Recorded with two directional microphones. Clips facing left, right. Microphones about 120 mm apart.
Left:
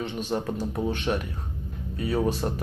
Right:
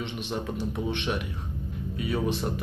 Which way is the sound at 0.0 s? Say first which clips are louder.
Left 4 dB; 40° left (ahead or behind).